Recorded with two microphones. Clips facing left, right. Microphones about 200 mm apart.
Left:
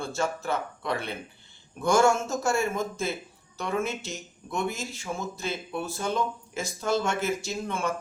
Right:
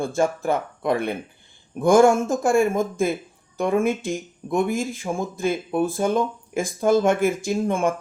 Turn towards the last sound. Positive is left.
turn(degrees=-50)  # may be behind; listen again after turning